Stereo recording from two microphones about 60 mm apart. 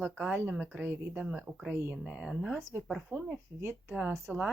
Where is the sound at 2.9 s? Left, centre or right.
Centre.